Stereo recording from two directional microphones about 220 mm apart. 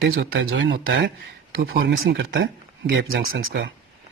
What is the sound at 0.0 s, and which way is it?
Speech, 55° right (ahead or behind).